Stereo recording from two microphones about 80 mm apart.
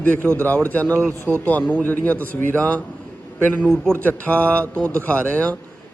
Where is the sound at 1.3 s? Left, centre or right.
Right.